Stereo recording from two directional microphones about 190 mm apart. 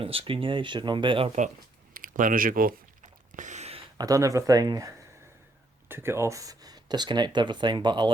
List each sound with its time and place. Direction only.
0.0 s speech: 30° right (ahead or behind)
1.9 s a sound: 45° right (ahead or behind)
3.9 s speech: 20° right (ahead or behind)